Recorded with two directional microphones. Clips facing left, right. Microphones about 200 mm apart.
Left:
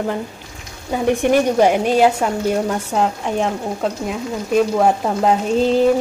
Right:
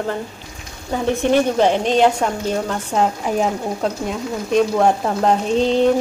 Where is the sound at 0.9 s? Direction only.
15° left (ahead or behind).